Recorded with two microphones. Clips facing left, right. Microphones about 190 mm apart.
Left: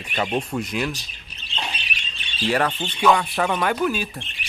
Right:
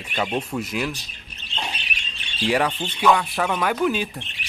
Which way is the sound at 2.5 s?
10° right (ahead or behind).